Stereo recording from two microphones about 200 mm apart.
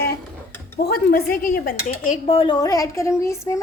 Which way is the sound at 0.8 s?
50° left (ahead or behind).